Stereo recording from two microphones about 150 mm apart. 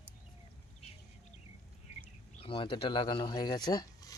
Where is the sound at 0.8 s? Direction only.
40° left (ahead or behind).